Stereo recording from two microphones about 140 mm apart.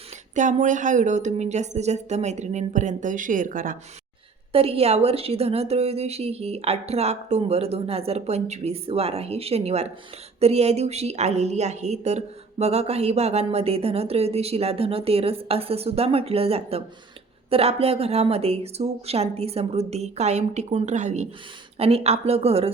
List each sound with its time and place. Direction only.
0.3 s speech: 65° right (ahead or behind)
4.5 s a woman's voice: 45° right (ahead or behind)
21.8 s a woman's voice: 45° right (ahead or behind)